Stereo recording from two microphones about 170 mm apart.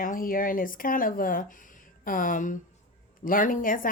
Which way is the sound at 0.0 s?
55° left (ahead or behind).